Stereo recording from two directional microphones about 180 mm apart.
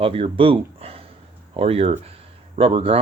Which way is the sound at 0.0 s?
30° right (ahead or behind).